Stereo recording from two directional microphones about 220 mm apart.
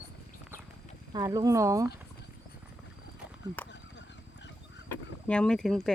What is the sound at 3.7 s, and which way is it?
Fowl, 55° left (ahead or behind).